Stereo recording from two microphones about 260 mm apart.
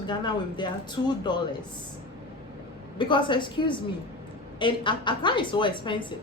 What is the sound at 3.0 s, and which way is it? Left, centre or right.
A woman's voice, centre.